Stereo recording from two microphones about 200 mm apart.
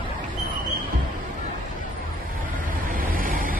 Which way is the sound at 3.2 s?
45° right (ahead or behind).